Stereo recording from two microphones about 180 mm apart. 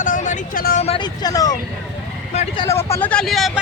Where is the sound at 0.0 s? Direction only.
45° left (ahead or behind).